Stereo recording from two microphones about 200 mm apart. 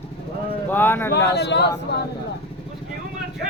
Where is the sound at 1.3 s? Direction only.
60° left (ahead or behind).